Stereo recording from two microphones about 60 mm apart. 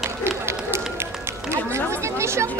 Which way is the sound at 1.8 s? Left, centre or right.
Right.